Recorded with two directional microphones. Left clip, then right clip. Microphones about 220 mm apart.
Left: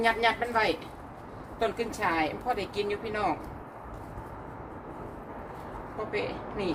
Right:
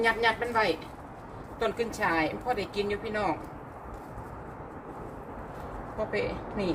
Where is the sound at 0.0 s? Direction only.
10° left (ahead or behind).